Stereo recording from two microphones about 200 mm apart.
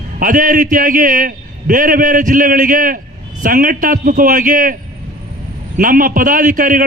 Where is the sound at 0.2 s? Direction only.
45° right (ahead or behind).